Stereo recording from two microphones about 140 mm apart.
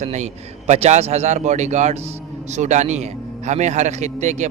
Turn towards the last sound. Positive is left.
turn(degrees=-55)  # may be behind; listen again after turning